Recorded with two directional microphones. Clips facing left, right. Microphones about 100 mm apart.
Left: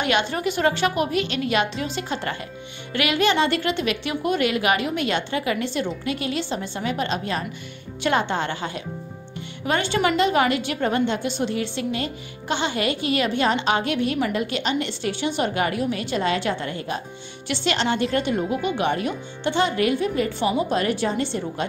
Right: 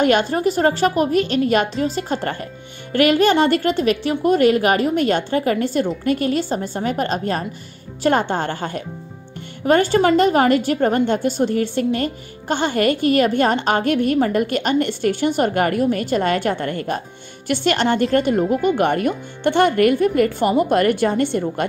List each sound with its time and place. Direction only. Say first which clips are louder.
0.0 s a woman's voice: right 6 dB; 40° right (ahead or behind)